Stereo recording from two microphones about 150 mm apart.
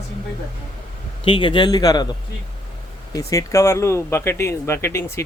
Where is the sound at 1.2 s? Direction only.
35° left (ahead or behind).